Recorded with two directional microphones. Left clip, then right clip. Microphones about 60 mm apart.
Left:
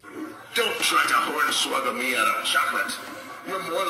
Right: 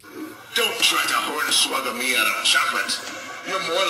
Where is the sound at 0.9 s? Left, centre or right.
Left.